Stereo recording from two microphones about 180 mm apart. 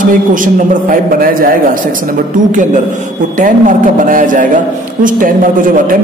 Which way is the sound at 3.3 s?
45° right (ahead or behind).